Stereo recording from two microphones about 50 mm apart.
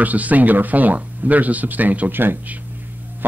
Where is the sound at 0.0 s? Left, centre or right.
Right.